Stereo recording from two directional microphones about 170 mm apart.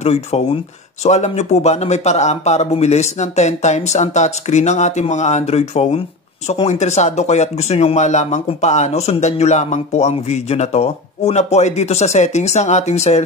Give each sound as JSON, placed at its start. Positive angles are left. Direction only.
{"t": 0.0, "sound": "speech", "side_deg": 40}